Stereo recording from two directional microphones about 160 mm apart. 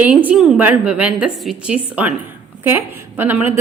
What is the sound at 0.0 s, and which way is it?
A woman's voice, 10° right (ahead or behind).